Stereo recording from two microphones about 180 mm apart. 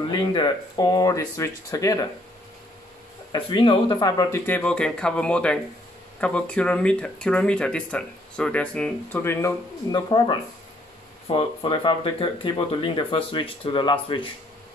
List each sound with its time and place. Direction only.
0.1 s speech: 25° left (ahead or behind)
3.3 s speech: 25° left (ahead or behind)